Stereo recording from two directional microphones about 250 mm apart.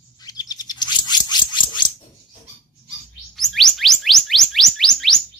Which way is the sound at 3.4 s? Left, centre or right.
Centre.